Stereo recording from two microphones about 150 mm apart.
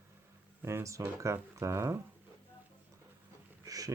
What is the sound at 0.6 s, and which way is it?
Speech, 15° right (ahead or behind).